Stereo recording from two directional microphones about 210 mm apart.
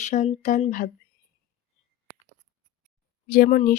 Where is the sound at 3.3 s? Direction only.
40° left (ahead or behind).